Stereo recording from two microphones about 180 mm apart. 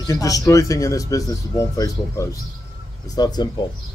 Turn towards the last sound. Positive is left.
turn(degrees=20)  # may be behind; listen again after turning